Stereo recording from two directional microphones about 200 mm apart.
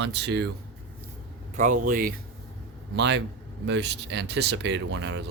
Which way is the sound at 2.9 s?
60° right (ahead or behind).